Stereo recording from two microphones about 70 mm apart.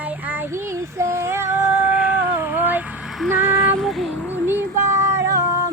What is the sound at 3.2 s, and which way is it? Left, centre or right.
Female singing, right.